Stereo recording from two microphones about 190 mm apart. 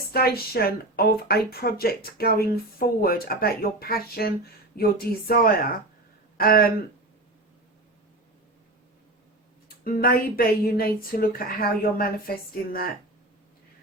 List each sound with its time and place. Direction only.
0.1 s speech: 55° left (ahead or behind)
9.6 s speech: 50° left (ahead or behind)